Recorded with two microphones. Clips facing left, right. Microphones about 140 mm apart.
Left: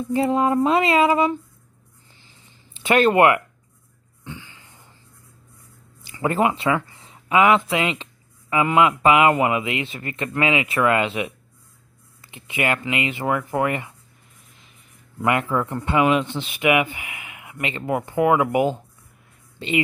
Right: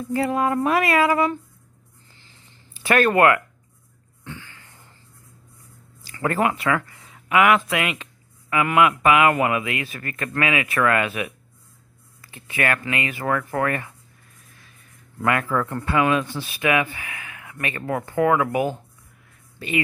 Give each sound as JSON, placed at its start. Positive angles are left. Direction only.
{"t": 0.0, "sound": "speech", "side_deg": 20}
{"t": 2.7, "sound": "speech", "side_deg": 20}
{"t": 4.2, "sound": "a sound", "side_deg": 15}
{"t": 6.0, "sound": "a man's voice", "side_deg": 20}